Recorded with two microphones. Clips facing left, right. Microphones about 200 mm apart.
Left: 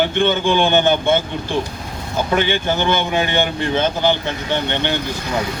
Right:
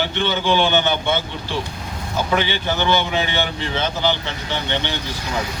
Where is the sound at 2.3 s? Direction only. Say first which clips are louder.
Left 4 dB; 50° left (ahead or behind).